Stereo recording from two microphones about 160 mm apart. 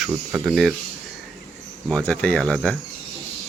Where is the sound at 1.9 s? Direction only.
10° left (ahead or behind).